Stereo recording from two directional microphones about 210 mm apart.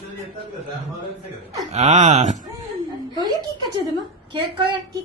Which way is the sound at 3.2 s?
20° right (ahead or behind).